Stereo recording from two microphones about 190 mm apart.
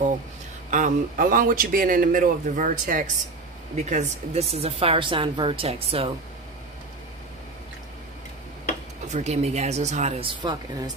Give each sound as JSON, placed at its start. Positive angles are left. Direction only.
{"t": 0.7, "sound": "speech", "side_deg": -40}
{"t": 9.0, "sound": "speech", "side_deg": -35}